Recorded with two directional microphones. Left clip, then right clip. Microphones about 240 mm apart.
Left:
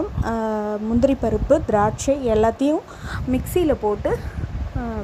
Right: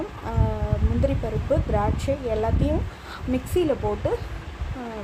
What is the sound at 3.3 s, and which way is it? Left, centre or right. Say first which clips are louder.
Speech: left 3 dB; left.